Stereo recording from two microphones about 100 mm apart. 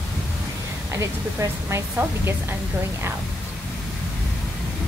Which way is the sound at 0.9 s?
30° right (ahead or behind).